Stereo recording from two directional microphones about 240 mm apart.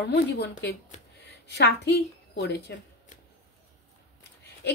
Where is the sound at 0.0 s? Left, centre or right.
Left.